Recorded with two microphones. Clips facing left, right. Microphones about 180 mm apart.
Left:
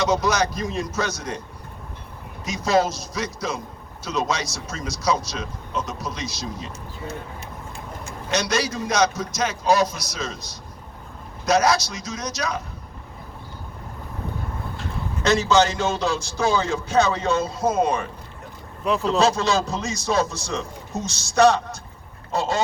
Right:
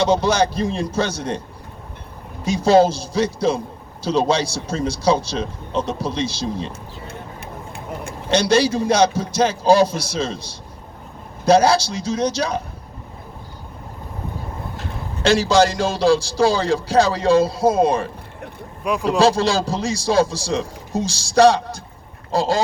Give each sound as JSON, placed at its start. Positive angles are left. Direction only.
{"t": 0.0, "sound": "a man's voice", "side_deg": -30}
{"t": 2.4, "sound": "speech", "side_deg": -30}
{"t": 8.3, "sound": "speech", "side_deg": -30}
{"t": 15.2, "sound": "a man's voice", "side_deg": -35}
{"t": 18.9, "sound": "speech", "side_deg": -15}
{"t": 19.2, "sound": "a man's voice", "side_deg": -30}